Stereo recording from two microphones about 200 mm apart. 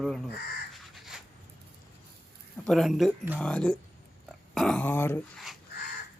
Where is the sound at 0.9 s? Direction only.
Centre (ahead or behind).